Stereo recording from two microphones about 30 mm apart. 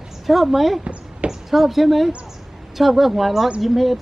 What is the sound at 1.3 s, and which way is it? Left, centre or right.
A woman's voice, centre.